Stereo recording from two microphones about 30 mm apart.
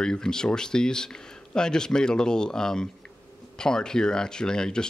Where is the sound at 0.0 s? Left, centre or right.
Left.